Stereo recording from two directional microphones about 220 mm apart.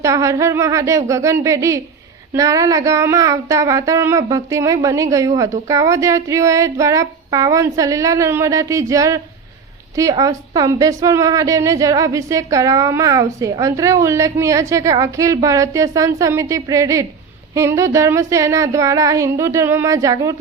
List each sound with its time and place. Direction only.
0.0 s a woman's voice: 15° right (ahead or behind)